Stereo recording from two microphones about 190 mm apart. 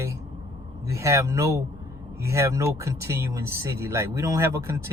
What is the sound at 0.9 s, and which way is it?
A man's voice, 15° right (ahead or behind).